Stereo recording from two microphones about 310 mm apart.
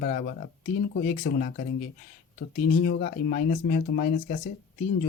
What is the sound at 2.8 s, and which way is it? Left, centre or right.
Speech, left.